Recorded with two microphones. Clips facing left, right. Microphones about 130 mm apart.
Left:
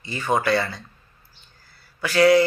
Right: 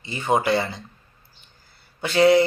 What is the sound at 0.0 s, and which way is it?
Speech, 20° right (ahead or behind).